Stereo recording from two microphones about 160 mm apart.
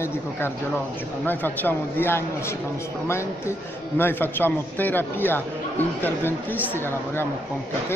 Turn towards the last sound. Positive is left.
turn(degrees=15)  # may be behind; listen again after turning